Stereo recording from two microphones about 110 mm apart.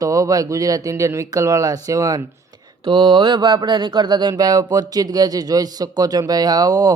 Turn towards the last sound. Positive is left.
turn(degrees=-35)  # may be behind; listen again after turning